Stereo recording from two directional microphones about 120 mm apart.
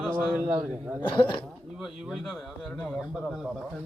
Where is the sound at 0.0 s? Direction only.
15° right (ahead or behind).